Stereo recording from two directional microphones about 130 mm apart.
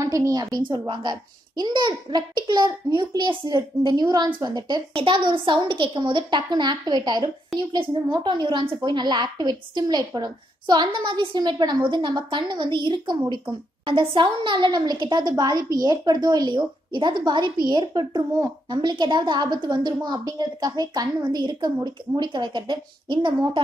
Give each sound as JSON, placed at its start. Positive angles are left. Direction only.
{"t": 0.0, "sound": "a woman's voice", "side_deg": -25}